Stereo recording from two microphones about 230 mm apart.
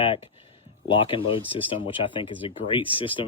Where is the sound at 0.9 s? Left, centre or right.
Left.